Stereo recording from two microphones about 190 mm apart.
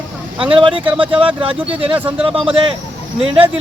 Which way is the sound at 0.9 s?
5° right (ahead or behind).